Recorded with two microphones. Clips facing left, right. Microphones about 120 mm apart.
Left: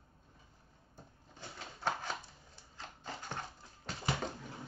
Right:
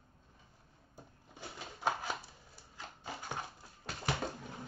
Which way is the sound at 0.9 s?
10° right (ahead or behind).